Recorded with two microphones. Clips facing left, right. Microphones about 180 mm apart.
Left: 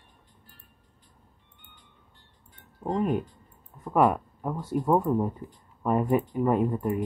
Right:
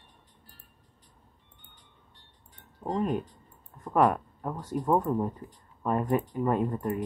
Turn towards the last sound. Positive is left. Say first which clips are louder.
# left 3 dB
turn(degrees=10)  # may be behind; listen again after turning